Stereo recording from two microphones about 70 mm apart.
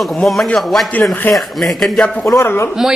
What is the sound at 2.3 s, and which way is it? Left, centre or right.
Speech, left.